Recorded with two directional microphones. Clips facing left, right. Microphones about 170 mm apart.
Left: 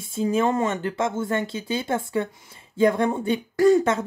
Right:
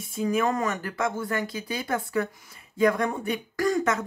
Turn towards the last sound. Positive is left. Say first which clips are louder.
# left 7 dB
turn(degrees=30)  # may be behind; listen again after turning